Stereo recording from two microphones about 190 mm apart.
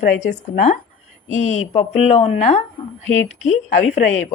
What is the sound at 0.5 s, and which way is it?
Speech, 40° left (ahead or behind).